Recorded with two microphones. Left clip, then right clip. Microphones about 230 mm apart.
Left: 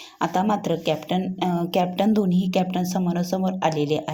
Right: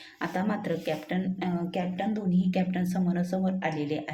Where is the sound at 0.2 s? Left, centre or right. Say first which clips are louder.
Left 9 dB; left.